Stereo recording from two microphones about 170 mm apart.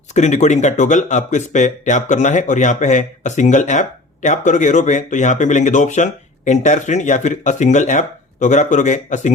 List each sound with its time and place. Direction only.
0.1 s speech: 45° left (ahead or behind)